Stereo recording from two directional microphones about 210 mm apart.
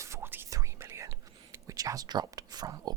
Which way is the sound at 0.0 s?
10° right (ahead or behind).